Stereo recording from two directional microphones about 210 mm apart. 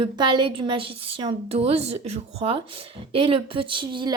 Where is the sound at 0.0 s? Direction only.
20° right (ahead or behind).